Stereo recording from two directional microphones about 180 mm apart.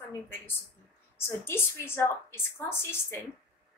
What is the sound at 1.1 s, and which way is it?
A woman's voice, 15° left (ahead or behind).